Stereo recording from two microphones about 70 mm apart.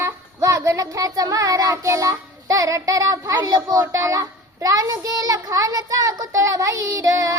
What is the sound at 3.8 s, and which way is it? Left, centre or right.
A child's voice, right.